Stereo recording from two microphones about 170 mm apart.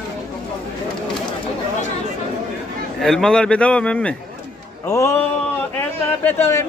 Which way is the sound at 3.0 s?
5° left (ahead or behind).